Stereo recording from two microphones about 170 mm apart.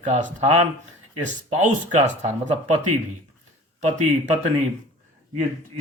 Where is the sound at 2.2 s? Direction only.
45° right (ahead or behind).